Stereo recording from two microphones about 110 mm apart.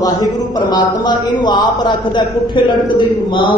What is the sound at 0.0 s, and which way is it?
A man's voice, 35° left (ahead or behind).